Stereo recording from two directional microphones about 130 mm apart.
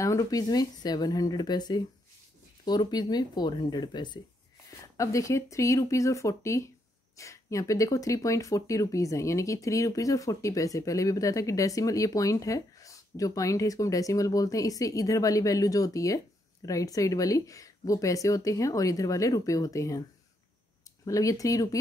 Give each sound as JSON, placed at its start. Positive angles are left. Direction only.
{"t": 0.0, "sound": "speech", "side_deg": 25}
{"t": 4.9, "sound": "speech", "side_deg": 25}